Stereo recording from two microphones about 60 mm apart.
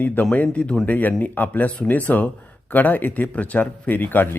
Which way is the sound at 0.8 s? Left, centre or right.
Left.